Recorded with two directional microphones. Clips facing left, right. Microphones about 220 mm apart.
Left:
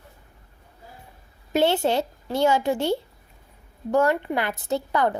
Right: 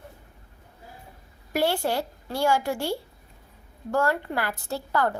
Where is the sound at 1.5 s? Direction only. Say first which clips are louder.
Left 4 dB; 20° left (ahead or behind).